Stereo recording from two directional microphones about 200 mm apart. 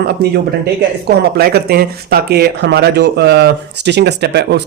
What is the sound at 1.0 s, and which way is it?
Speech, 50° right (ahead or behind).